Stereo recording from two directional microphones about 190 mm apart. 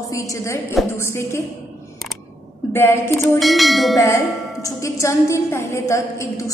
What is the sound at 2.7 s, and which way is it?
Speech, 15° left (ahead or behind).